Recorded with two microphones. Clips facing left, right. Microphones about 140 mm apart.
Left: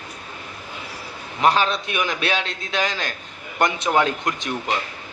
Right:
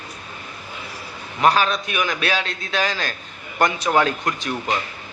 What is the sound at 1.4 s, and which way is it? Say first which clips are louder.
A man's voice: right 1 dB; 25° left (ahead or behind).